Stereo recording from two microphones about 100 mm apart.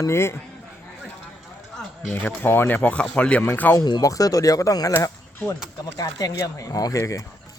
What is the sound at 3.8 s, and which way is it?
Speech, 40° left (ahead or behind).